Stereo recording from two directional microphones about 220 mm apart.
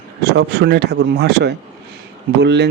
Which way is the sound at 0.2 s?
50° right (ahead or behind).